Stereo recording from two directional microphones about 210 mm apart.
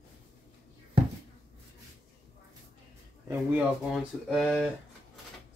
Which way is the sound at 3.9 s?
Centre (ahead or behind).